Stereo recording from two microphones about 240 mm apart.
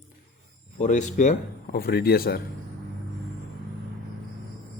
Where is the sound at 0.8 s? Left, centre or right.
Left.